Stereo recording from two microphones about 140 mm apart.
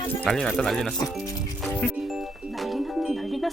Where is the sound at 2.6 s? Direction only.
Centre (ahead or behind).